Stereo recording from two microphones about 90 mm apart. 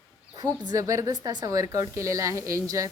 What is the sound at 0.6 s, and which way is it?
Speech, 45° right (ahead or behind).